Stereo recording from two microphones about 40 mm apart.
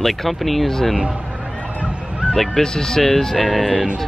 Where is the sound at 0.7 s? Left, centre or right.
Centre.